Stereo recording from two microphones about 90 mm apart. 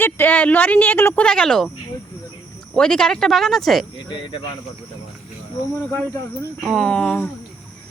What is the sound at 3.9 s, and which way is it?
Speech, 60° left (ahead or behind).